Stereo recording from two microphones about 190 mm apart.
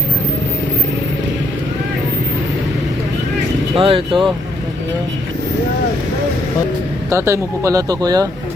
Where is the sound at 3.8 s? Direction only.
25° right (ahead or behind).